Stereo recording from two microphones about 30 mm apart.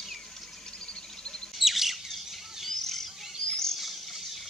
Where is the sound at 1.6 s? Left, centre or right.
Centre.